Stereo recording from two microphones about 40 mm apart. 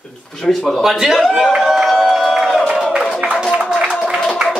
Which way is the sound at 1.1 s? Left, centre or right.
Centre.